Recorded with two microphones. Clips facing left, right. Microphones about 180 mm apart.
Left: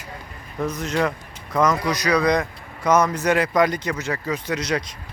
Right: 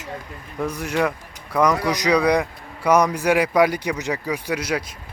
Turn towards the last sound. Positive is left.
turn(degrees=-10)  # may be behind; listen again after turning